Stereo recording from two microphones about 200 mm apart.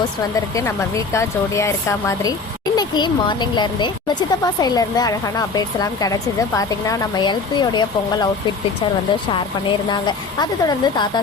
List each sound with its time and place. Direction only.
0.5 s speech: 15° left (ahead or behind)
9.3 s speech: 25° left (ahead or behind)